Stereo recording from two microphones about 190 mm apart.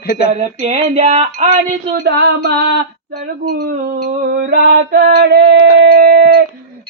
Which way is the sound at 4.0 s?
50° right (ahead or behind).